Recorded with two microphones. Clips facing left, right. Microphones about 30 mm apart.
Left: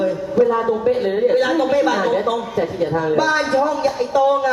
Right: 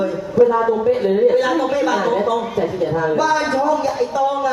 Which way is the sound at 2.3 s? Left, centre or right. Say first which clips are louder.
Right 1 dB; left.